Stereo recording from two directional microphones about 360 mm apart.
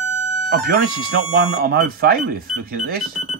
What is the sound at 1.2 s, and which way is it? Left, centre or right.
Speech, right.